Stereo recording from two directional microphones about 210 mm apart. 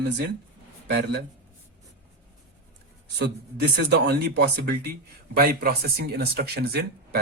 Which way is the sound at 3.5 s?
50° right (ahead or behind).